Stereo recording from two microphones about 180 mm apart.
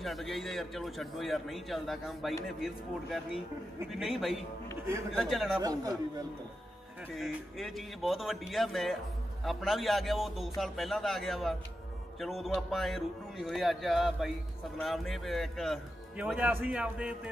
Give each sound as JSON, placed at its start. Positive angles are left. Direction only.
{"t": 0.0, "sound": "a man's voice", "side_deg": 0}
{"t": 5.6, "sound": "speech", "side_deg": -20}
{"t": 7.2, "sound": "a man's voice", "side_deg": 0}